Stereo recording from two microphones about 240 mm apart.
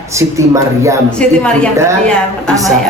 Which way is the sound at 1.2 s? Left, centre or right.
Centre.